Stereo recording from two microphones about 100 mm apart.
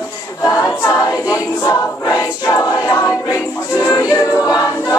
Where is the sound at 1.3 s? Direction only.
30° left (ahead or behind).